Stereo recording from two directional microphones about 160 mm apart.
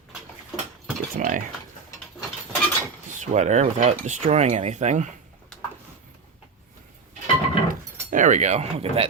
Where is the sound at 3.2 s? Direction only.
45° right (ahead or behind).